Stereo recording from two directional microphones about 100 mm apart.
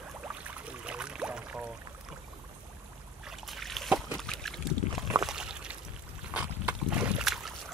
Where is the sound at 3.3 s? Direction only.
Centre (ahead or behind).